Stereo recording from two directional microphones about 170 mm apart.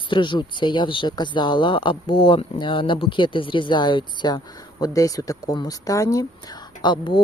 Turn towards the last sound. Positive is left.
turn(degrees=25)  # may be behind; listen again after turning